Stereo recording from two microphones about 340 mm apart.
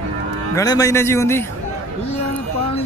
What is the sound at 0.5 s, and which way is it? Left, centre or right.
Speech, centre.